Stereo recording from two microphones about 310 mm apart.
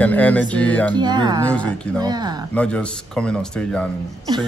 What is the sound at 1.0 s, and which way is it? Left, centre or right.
Speech, centre.